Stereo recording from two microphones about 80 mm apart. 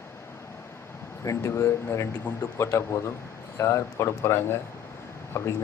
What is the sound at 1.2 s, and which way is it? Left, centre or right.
Speech, left.